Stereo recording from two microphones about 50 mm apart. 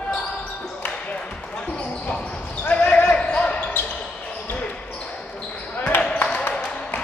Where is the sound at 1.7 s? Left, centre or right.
Left.